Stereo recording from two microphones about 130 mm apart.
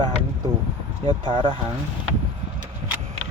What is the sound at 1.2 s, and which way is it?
Speech, 35° right (ahead or behind).